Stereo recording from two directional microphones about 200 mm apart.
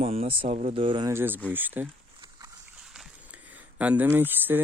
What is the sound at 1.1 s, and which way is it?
Speech, 10° right (ahead or behind).